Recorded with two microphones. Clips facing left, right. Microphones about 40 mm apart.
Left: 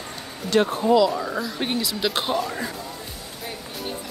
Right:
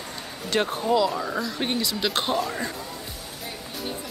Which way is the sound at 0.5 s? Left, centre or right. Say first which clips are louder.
Left 5 dB; centre.